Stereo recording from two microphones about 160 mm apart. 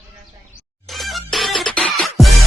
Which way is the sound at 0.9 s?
Centre (ahead or behind).